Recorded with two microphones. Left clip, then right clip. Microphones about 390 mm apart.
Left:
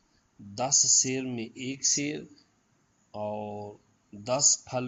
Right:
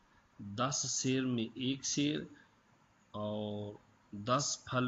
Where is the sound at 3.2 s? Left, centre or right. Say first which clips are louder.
Left 6 dB; left.